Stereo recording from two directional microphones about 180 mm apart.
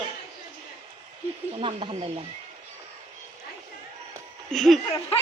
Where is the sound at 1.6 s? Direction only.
30° right (ahead or behind).